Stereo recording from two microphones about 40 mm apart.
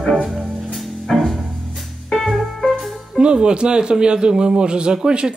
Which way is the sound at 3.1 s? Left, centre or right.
Right.